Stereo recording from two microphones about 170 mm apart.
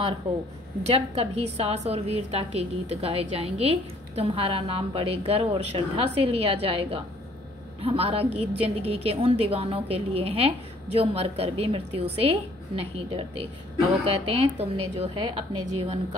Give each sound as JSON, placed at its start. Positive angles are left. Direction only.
{"t": 0.8, "sound": "a woman's voice", "side_deg": -35}